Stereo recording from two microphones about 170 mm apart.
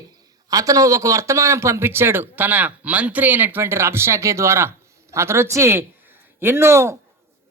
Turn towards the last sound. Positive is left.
turn(degrees=-15)  # may be behind; listen again after turning